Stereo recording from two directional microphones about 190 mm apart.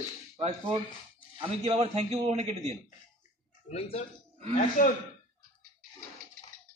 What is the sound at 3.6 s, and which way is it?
Speech, 35° left (ahead or behind).